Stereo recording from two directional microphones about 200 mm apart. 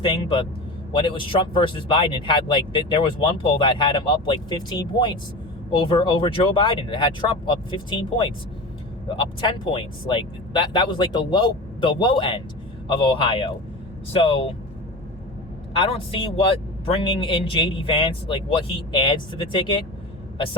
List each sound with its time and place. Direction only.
0.0 s speech: 25° left (ahead or behind)
15.8 s speech: 25° left (ahead or behind)